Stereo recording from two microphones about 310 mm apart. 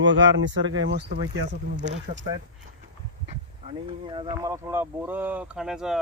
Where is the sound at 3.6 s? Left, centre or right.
Centre.